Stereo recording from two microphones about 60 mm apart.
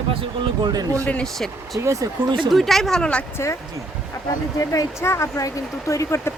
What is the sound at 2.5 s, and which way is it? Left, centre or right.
Speech, centre.